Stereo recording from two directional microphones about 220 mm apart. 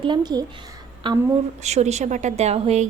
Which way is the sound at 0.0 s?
20° right (ahead or behind).